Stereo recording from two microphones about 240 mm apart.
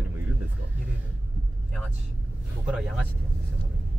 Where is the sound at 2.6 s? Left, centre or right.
Centre.